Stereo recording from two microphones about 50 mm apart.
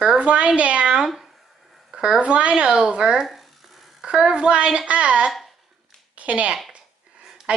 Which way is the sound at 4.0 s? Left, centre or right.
Centre.